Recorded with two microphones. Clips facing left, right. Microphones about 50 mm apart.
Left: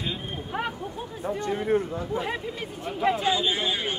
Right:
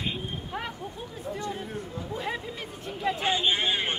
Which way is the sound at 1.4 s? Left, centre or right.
Left.